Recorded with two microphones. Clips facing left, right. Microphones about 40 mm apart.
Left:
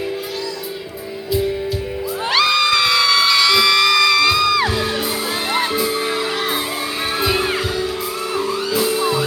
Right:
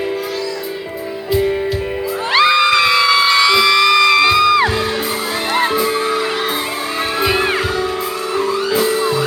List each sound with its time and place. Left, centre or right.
2.3 s music: right
7.2 s music: right